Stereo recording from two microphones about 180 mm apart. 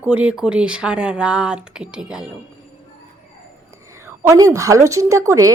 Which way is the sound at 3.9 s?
15° right (ahead or behind).